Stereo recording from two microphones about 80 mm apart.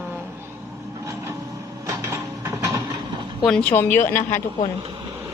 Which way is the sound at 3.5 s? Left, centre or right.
Centre.